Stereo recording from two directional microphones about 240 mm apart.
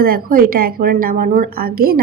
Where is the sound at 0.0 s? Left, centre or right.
Right.